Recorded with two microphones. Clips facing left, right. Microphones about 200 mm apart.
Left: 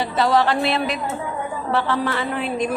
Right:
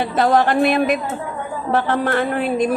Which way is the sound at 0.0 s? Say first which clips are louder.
Right 2 dB; 50° right (ahead or behind).